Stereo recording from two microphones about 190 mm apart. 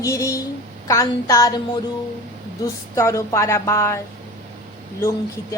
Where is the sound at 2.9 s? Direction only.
15° left (ahead or behind).